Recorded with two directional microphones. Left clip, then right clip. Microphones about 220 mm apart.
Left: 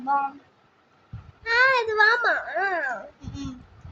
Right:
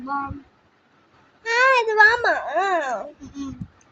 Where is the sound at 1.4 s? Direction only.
15° right (ahead or behind).